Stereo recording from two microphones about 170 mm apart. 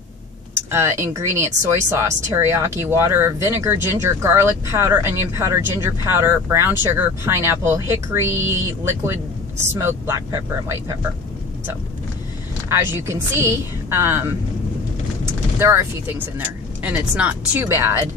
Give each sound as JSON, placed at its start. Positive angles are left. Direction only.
{"t": 0.6, "sound": "speech", "side_deg": -15}
{"t": 12.6, "sound": "speech", "side_deg": -15}
{"t": 15.6, "sound": "speech", "side_deg": -15}